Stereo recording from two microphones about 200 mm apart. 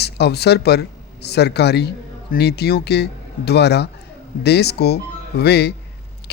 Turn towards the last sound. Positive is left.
turn(degrees=55)  # may be behind; listen again after turning